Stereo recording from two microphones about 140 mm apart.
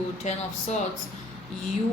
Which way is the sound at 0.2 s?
55° left (ahead or behind).